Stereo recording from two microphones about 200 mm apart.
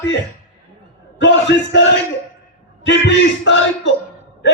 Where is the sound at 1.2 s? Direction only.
65° left (ahead or behind).